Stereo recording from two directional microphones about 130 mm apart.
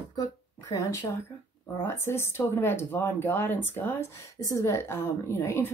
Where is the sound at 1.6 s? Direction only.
20° left (ahead or behind).